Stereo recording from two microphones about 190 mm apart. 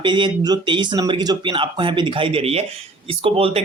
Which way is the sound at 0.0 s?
25° right (ahead or behind).